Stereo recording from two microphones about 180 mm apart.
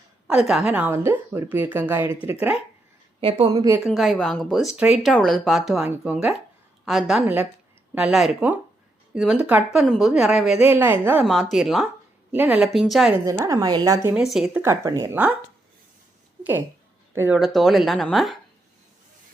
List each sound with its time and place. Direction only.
0.3 s a woman's voice: 5° right (ahead or behind)
3.2 s speech: 30° right (ahead or behind)
3.8 s a woman's voice: centre (ahead or behind)
13.2 s a woman's voice: 15° right (ahead or behind)
14.1 s a woman's voice: 5° right (ahead or behind)
14.6 s a woman's voice: 15° right (ahead or behind)
15.1 s a woman's voice: 10° right (ahead or behind)
17.2 s a woman's voice: 5° right (ahead or behind)